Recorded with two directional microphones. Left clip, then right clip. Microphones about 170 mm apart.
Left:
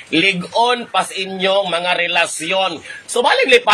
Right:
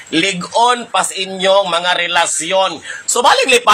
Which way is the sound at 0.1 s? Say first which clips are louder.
Even; 10° left (ahead or behind).